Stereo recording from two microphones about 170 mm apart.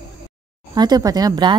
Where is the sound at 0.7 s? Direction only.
25° right (ahead or behind).